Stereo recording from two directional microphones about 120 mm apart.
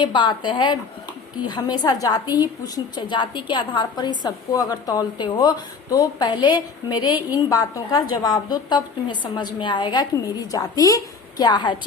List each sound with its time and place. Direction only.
0.0 s a woman's voice: 40° left (ahead or behind)